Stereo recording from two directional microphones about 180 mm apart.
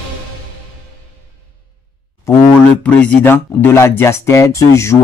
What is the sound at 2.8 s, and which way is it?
Speech, 5° left (ahead or behind).